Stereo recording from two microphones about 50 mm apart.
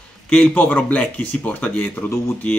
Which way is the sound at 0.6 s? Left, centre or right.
Left.